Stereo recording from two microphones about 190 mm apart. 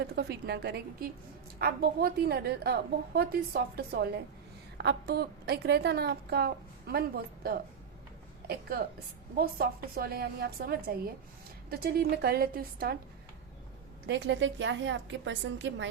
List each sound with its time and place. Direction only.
0.0 s a woman's voice: 60° right (ahead or behind)
14.1 s a woman's voice: 70° right (ahead or behind)